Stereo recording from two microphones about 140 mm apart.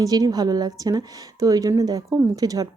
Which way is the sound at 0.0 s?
25° right (ahead or behind).